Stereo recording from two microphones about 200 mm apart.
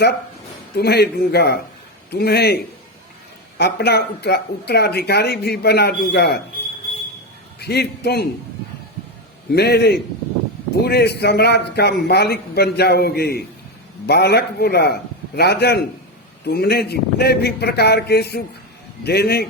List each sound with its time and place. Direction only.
0.8 s a man's voice: 55° left (ahead or behind)
3.6 s speech: 55° left (ahead or behind)
7.6 s speech: 55° left (ahead or behind)
9.5 s a man's voice: 55° left (ahead or behind)